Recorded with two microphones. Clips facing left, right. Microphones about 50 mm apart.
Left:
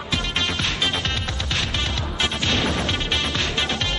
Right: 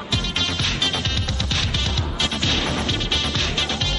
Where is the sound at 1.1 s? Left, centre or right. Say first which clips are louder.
Even; centre.